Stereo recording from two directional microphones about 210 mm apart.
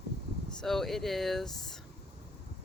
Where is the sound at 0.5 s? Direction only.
Centre (ahead or behind).